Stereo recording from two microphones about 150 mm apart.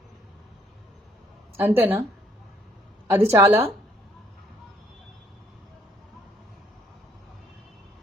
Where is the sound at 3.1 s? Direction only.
15° right (ahead or behind).